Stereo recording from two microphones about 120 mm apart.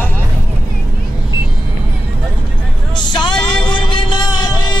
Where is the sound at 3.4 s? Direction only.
5° left (ahead or behind).